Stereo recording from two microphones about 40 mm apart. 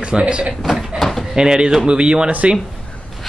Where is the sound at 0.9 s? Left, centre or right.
Centre.